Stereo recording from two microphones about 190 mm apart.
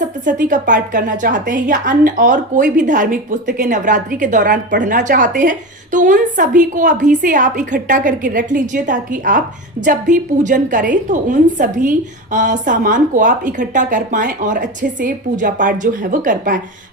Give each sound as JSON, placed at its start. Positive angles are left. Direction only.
{"t": 0.3, "sound": "a woman's voice", "side_deg": -45}